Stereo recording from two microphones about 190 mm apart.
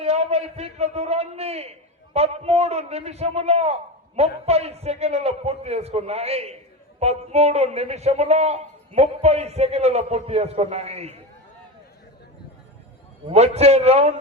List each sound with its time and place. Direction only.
0.0 s a man's voice: 35° right (ahead or behind)
13.2 s a man's voice: 35° right (ahead or behind)